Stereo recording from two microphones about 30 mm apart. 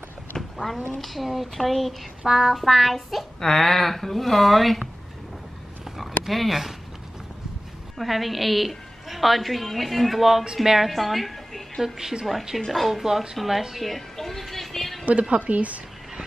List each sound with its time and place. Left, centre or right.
0.4 s a sound: centre
0.9 s a woman's voice: centre
2.2 s a sound: centre
2.6 s a woman's voice: centre
3.3 s speech: centre
6.2 s a woman's voice: centre
8.0 s a woman's voice: centre
10.6 s a sound: centre
10.9 s a woman's voice: centre
11.8 s a woman's voice: centre
12.6 s a woman's voice: centre
13.4 s a woman's voice: centre
13.8 s a sound: centre
15.0 s a woman's voice: right